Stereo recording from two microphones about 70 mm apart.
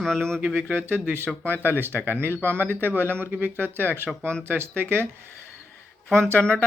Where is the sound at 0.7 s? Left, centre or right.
Right.